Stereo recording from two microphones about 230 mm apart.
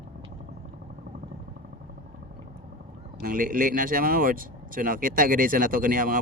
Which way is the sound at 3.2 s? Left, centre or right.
Right.